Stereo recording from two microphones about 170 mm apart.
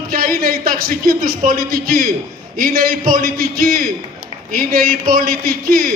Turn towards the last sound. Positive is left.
turn(degrees=-55)  # may be behind; listen again after turning